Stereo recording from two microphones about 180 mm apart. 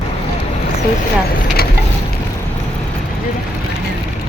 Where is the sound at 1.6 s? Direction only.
60° left (ahead or behind).